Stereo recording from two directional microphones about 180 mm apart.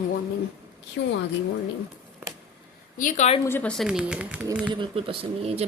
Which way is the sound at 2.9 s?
45° left (ahead or behind).